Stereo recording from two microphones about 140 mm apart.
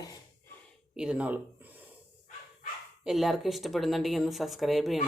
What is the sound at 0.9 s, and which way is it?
Speech, 5° right (ahead or behind).